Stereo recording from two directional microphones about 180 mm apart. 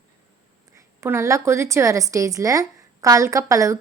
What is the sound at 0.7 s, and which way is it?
A woman's voice, 15° right (ahead or behind).